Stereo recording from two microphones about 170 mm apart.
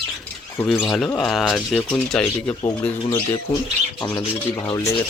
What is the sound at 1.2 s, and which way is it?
Speech, centre (ahead or behind).